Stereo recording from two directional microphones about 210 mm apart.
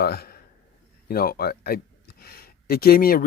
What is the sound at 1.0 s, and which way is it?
Speech, 45° left (ahead or behind).